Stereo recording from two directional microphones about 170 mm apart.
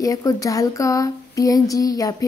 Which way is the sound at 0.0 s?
20° left (ahead or behind).